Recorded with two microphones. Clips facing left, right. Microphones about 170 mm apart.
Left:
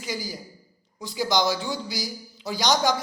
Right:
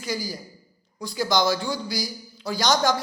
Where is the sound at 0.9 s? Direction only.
20° left (ahead or behind).